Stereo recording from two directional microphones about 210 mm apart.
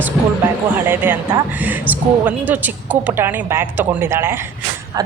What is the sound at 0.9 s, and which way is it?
A woman's voice, 10° right (ahead or behind).